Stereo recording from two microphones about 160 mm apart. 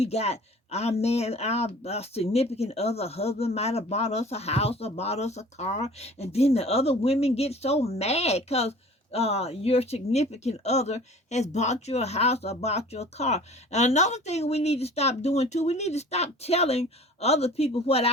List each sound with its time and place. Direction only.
0.0 s speech: 40° left (ahead or behind)